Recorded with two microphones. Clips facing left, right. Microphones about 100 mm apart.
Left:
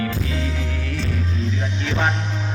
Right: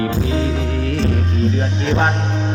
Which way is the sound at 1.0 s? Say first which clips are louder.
Right 6 dB; 60° right (ahead or behind).